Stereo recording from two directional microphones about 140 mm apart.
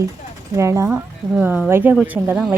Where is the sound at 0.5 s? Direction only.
20° right (ahead or behind).